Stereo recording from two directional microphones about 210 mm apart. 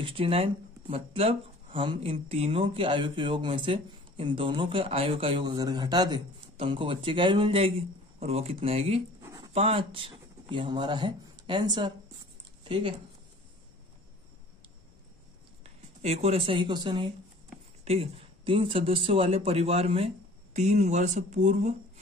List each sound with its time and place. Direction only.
0.0 s speech: 25° right (ahead or behind)
9.2 s a sound: 15° right (ahead or behind)
9.5 s speech: 25° right (ahead or behind)
15.6 s speech: 30° right (ahead or behind)